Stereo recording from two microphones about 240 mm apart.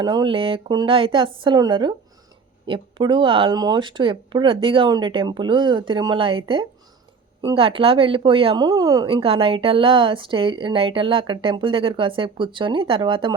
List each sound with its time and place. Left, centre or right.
0.0 s speech: centre